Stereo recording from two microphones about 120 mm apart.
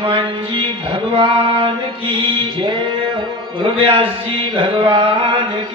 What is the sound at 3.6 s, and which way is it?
Music, 45° right (ahead or behind).